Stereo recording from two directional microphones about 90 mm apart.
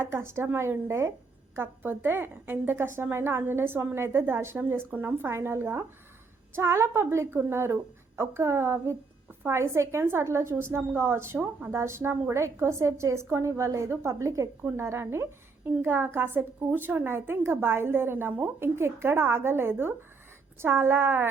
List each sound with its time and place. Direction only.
0.0 s a woman's voice: 30° right (ahead or behind)